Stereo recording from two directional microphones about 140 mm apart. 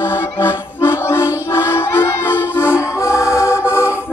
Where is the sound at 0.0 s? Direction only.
15° left (ahead or behind).